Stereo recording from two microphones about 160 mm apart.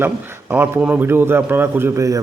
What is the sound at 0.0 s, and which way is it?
A man's voice, 15° right (ahead or behind).